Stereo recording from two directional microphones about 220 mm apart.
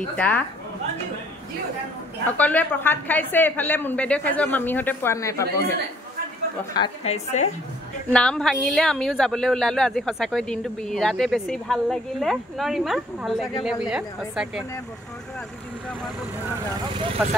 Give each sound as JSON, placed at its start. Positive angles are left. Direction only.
{"t": 0.1, "sound": "a woman's voice", "side_deg": 5}
{"t": 2.2, "sound": "a woman's voice", "side_deg": 5}
{"t": 6.7, "sound": "a woman's voice", "side_deg": 25}
{"t": 8.1, "sound": "a woman's voice", "side_deg": 5}